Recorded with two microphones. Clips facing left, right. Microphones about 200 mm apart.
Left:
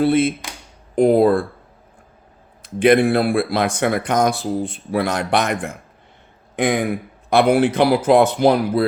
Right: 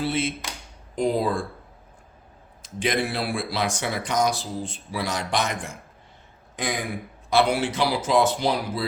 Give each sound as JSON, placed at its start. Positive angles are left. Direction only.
{"t": 0.0, "sound": "speech", "side_deg": 55}
{"t": 2.6, "sound": "speech", "side_deg": 60}